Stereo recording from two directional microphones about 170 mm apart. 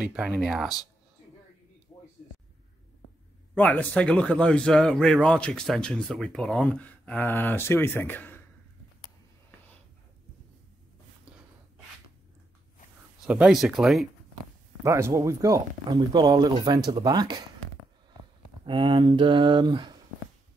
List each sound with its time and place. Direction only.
0.0 s a man's voice: 5° right (ahead or behind)
3.5 s a man's voice: 10° left (ahead or behind)
13.2 s a man's voice: 5° right (ahead or behind)
14.8 s speech: 15° right (ahead or behind)
18.7 s speech: 30° right (ahead or behind)